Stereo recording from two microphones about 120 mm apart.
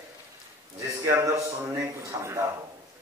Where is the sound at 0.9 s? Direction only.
25° right (ahead or behind).